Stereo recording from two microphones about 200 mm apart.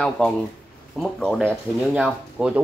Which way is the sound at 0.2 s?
5° left (ahead or behind).